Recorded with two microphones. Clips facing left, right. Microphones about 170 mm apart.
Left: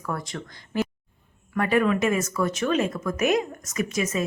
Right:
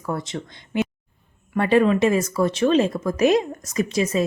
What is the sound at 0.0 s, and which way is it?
Speech, 25° right (ahead or behind).